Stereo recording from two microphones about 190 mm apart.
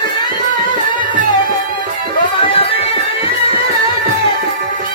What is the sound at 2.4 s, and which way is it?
Music, 30° left (ahead or behind).